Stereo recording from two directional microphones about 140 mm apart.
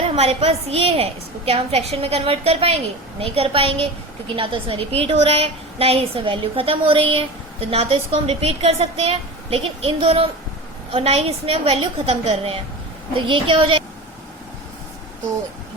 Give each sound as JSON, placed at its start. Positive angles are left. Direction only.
{"t": 0.2, "sound": "a woman's voice", "side_deg": -45}